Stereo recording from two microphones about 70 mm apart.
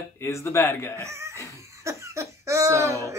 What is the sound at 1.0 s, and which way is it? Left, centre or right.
A man's voice, right.